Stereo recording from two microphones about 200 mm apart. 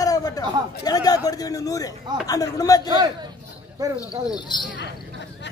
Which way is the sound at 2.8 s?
20° right (ahead or behind).